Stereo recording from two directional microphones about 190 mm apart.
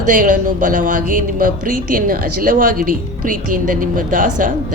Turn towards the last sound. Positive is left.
turn(degrees=-45)  # may be behind; listen again after turning